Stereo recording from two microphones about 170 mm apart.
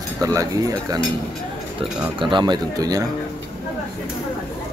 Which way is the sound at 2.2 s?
25° right (ahead or behind).